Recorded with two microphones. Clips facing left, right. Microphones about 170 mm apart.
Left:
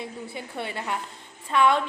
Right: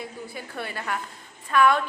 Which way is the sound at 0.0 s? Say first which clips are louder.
Left 1 dB; 25° left (ahead or behind).